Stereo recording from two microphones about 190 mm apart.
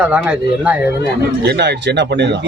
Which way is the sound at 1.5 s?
65° right (ahead or behind).